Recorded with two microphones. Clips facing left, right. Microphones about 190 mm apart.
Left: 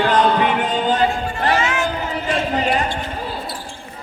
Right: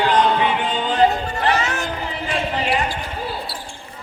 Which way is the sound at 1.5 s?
40° right (ahead or behind).